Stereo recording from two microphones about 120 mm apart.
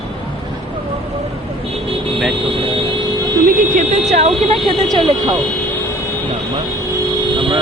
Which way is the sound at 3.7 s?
80° right.